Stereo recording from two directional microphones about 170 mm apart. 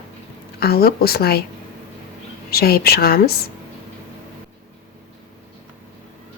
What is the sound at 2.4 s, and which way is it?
Speech, 65° left (ahead or behind).